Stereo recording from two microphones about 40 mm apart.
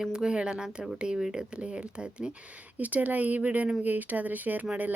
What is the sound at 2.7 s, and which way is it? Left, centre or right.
A woman's voice, right.